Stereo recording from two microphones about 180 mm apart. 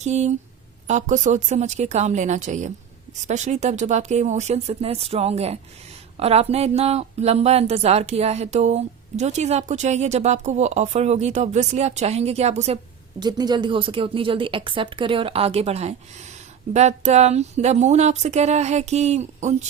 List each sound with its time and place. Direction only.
0.0 s speech: 40° right (ahead or behind)
13.1 s a woman's voice: 25° right (ahead or behind); by 19.5 s 40° right (ahead or behind)